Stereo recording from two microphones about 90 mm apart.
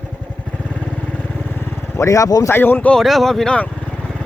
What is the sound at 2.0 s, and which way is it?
Speech, 35° left (ahead or behind).